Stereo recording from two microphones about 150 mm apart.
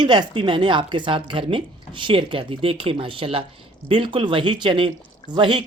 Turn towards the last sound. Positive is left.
turn(degrees=-35)  # may be behind; listen again after turning